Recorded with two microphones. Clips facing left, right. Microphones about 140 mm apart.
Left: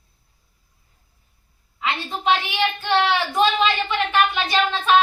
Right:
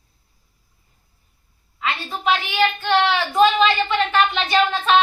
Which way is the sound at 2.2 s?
15° left (ahead or behind).